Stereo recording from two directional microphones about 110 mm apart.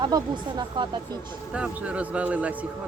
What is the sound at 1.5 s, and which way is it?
A man's voice, 10° right (ahead or behind).